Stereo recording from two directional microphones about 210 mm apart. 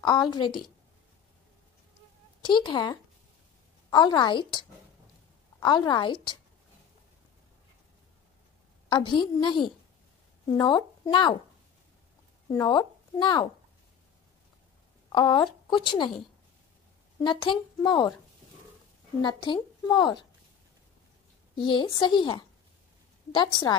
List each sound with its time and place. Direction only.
0.0 s speech: 20° left (ahead or behind)
2.4 s speech: 20° left (ahead or behind)
8.8 s a woman's voice: 20° left (ahead or behind)
12.4 s speech: 20° left (ahead or behind)
15.0 s a woman's voice: 20° left (ahead or behind)
17.2 s speech: 20° left (ahead or behind)
19.2 s speech: 20° left (ahead or behind)
21.5 s speech: 25° left (ahead or behind)